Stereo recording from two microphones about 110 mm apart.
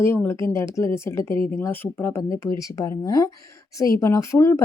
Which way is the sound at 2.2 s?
30° left (ahead or behind).